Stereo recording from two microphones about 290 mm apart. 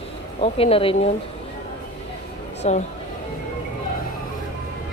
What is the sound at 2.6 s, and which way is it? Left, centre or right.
Speech, left.